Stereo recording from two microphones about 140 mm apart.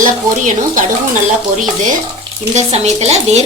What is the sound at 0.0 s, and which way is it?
Speech, 65° right (ahead or behind).